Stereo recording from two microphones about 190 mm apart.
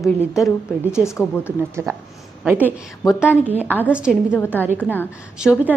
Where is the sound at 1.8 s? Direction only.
15° right (ahead or behind).